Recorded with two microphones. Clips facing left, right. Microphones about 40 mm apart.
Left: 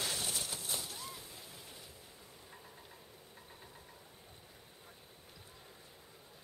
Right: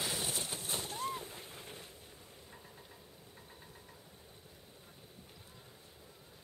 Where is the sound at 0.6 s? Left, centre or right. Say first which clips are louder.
Right 4 dB; right.